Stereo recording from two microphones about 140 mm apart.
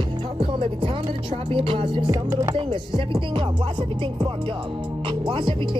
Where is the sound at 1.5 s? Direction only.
40° right (ahead or behind).